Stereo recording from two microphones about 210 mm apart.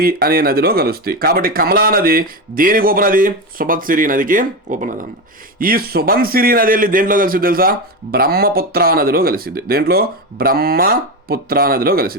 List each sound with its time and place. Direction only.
0.0 s a man's voice: 45° right (ahead or behind)